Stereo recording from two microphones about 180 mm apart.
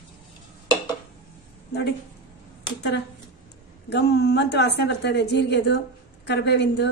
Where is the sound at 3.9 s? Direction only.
70° left (ahead or behind).